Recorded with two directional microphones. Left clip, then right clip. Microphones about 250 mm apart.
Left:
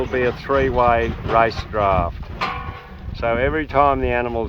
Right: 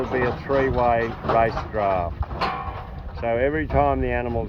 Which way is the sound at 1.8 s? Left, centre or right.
Left.